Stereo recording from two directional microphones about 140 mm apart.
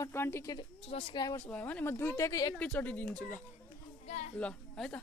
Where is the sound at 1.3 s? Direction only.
10° left (ahead or behind).